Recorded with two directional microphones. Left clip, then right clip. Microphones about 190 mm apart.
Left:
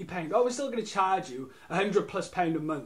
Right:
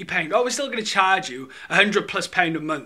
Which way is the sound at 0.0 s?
5° right (ahead or behind).